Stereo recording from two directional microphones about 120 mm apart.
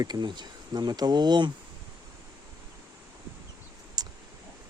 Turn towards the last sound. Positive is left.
turn(degrees=-35)  # may be behind; listen again after turning